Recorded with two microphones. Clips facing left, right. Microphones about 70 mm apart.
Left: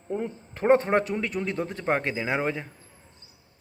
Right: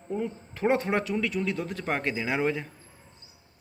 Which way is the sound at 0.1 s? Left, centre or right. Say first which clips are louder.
Left 1 dB; left.